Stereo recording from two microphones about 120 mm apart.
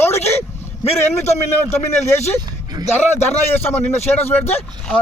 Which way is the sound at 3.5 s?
20° left (ahead or behind).